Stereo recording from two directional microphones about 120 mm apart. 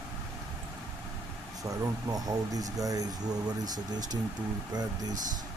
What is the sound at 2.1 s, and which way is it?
Speech, 30° right (ahead or behind).